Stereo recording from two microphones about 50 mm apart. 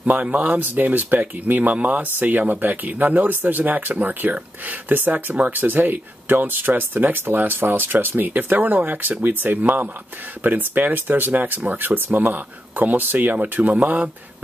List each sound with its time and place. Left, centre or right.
0.0 s speech: right